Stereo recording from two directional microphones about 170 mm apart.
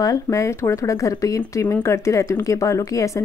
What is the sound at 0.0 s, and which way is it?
Speech, 20° left (ahead or behind).